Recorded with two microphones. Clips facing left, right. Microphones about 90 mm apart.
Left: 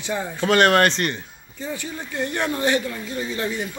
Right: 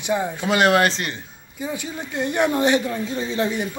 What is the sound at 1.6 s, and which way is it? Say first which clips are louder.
A woman's voice: right 2 dB; 15° right (ahead or behind).